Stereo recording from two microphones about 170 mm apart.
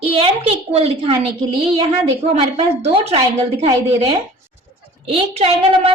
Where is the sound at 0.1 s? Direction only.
35° right (ahead or behind).